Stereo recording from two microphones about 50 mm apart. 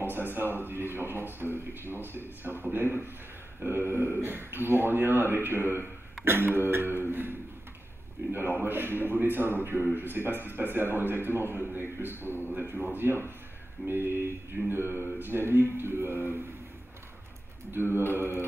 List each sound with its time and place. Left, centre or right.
0.0 s a man's voice: right
17.6 s a man's voice: right